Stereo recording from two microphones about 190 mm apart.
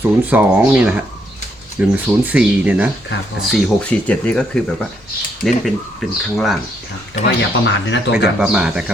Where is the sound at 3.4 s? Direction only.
5° left (ahead or behind).